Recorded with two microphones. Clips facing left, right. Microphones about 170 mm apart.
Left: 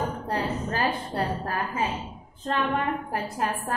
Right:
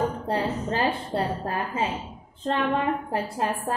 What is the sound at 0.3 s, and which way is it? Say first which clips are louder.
A woman's voice: right 2 dB; 25° right (ahead or behind).